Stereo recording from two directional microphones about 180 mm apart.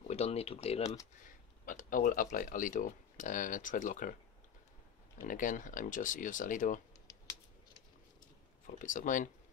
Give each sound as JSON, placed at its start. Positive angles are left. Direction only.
{"t": 0.1, "sound": "speech", "side_deg": 35}
{"t": 1.7, "sound": "speech", "side_deg": 45}
{"t": 5.2, "sound": "speech", "side_deg": 45}
{"t": 8.6, "sound": "speech", "side_deg": 45}